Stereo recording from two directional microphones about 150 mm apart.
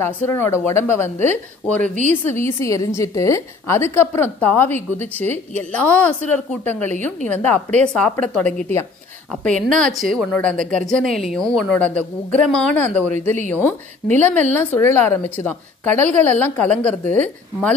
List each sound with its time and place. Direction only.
0.0 s a woman's voice: 15° left (ahead or behind)